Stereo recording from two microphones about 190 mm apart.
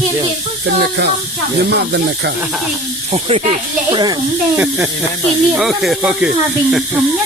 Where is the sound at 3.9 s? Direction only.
20° right (ahead or behind).